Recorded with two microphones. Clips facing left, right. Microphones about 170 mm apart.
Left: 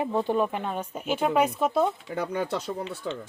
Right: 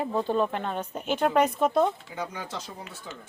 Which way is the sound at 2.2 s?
60° left (ahead or behind).